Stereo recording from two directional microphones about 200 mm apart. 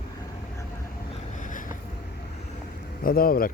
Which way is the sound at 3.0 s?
45° left (ahead or behind).